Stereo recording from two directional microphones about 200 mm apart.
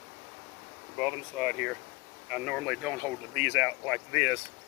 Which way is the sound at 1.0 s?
Centre (ahead or behind).